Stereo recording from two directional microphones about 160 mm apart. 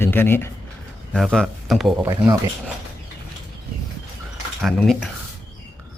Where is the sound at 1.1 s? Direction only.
Centre (ahead or behind).